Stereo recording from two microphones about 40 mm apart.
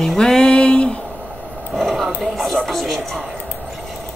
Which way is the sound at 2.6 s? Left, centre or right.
Centre.